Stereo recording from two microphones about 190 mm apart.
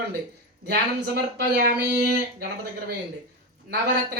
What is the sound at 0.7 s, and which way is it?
Speech, 55° right (ahead or behind).